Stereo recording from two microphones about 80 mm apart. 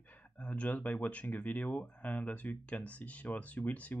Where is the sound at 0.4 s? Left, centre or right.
Centre.